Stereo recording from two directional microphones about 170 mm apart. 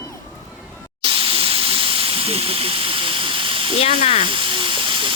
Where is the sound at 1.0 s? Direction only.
30° right (ahead or behind).